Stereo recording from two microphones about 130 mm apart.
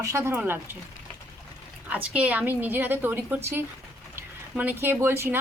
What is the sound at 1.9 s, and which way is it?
Speech, 10° right (ahead or behind).